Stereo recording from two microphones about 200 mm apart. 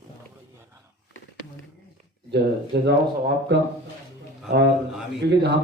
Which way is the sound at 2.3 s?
55° right (ahead or behind).